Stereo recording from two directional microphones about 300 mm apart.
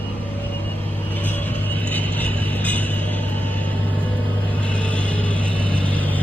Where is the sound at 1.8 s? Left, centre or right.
Centre.